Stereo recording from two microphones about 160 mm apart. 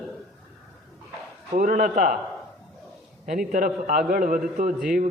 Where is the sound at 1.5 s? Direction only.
55° right (ahead or behind).